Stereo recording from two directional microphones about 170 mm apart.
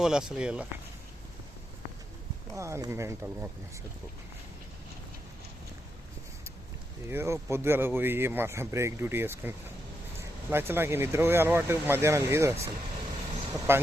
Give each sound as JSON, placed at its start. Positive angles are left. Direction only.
{"t": 0.0, "sound": "speech", "side_deg": -5}
{"t": 2.6, "sound": "a man's voice", "side_deg": -15}
{"t": 7.1, "sound": "a man's voice", "side_deg": -15}
{"t": 13.7, "sound": "a man's voice", "side_deg": -15}